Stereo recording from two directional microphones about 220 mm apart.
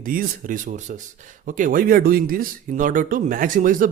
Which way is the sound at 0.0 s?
40° right (ahead or behind).